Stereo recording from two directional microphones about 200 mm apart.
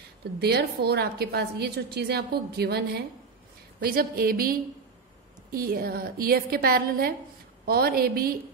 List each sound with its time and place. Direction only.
0.2 s a woman's voice: 55° right (ahead or behind)